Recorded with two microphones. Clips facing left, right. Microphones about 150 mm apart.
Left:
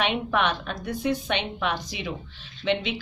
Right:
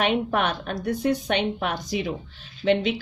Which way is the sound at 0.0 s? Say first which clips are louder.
Right 2 dB; 45° right (ahead or behind).